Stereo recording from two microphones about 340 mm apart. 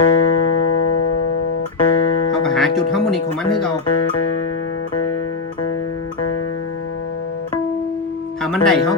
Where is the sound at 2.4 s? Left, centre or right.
Centre.